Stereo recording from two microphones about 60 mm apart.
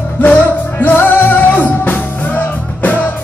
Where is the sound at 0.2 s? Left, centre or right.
Left.